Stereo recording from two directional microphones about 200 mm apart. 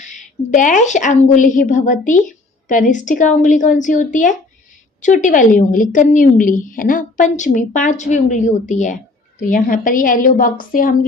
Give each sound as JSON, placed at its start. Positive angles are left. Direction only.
{"t": 0.0, "sound": "a woman's voice", "side_deg": 40}